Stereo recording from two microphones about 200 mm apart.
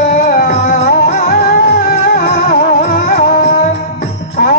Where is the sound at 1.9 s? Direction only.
50° left (ahead or behind).